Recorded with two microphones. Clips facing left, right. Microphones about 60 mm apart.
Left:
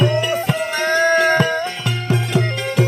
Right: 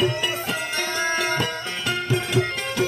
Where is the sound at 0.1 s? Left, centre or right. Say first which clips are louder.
Left 7 dB; left.